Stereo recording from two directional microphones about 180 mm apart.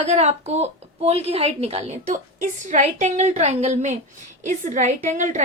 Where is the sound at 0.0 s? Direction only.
35° right (ahead or behind).